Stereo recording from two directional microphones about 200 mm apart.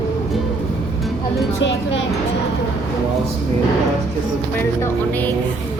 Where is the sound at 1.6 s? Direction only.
65° left (ahead or behind).